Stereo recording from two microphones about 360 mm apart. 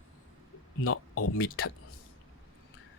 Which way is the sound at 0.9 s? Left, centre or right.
Left.